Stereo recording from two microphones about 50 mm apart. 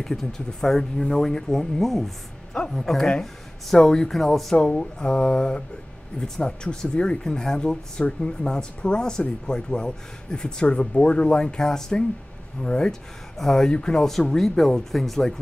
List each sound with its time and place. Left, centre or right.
0.0 s speech: centre
4.6 s speech: centre
14.3 s speech: centre